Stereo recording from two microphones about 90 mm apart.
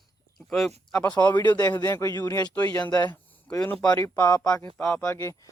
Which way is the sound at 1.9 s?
30° left (ahead or behind).